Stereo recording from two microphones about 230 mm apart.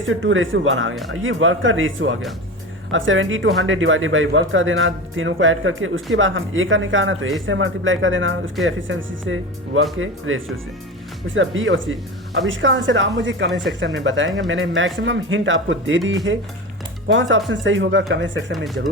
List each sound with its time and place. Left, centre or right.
0.0 s speech: right
18.5 s speech: centre